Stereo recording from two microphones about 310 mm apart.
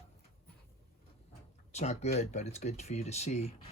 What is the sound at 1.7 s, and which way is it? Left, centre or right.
Speech, left.